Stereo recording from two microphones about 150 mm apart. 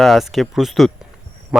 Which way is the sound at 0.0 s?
Centre (ahead or behind).